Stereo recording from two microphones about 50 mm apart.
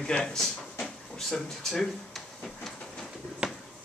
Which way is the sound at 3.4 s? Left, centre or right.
Centre.